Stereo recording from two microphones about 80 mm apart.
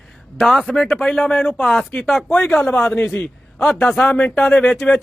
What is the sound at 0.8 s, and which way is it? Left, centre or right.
A man's voice, centre.